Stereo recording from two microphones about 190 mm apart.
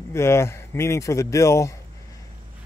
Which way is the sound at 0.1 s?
15° left (ahead or behind).